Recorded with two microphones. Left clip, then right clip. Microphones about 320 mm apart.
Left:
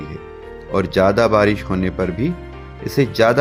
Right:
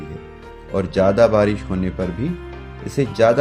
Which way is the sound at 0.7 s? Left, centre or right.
Left.